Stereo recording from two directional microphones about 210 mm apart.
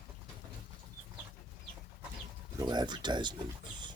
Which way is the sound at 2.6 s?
20° right (ahead or behind).